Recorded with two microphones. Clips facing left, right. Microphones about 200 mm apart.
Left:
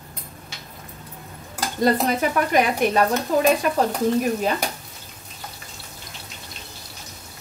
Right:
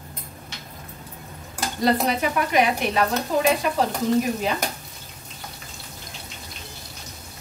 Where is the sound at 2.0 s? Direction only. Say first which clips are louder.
Left 2 dB; 45° left (ahead or behind).